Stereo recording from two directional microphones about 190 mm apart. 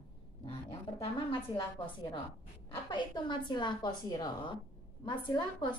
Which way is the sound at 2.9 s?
25° left (ahead or behind).